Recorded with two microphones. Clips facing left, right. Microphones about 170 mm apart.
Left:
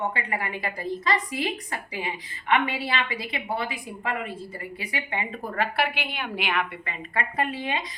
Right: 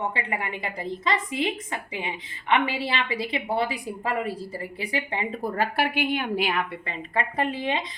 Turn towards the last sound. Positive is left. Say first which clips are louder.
# right 2 dB
turn(degrees=-25)  # may be behind; listen again after turning